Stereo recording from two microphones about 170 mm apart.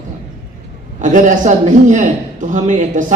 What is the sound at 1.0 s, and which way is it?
Speech, 50° right (ahead or behind).